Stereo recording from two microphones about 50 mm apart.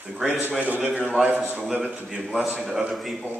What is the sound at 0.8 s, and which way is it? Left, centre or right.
Speech, right.